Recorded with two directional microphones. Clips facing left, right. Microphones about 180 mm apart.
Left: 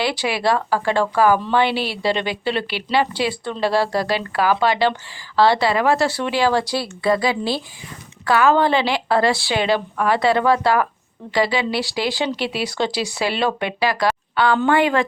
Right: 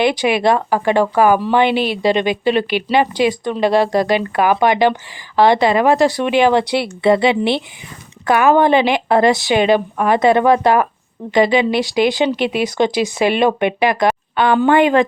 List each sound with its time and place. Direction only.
0.0 s speech: 20° right (ahead or behind)